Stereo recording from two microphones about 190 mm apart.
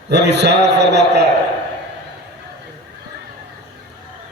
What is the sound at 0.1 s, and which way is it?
A man's voice, 65° right (ahead or behind).